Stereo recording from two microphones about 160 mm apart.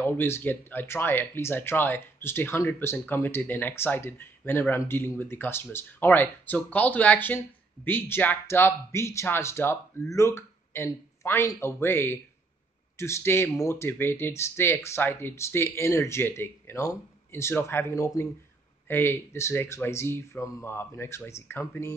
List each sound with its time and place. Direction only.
0.0 s speech: 10° left (ahead or behind)